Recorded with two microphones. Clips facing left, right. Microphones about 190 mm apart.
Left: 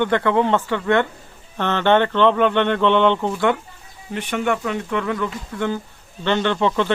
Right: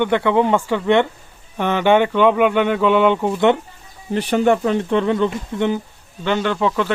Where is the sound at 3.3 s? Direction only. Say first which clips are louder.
Right 4 dB; 20° right (ahead or behind).